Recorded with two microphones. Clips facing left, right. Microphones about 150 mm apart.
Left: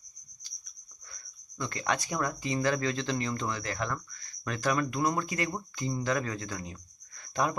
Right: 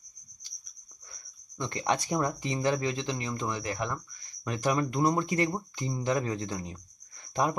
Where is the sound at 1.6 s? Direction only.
25° right (ahead or behind).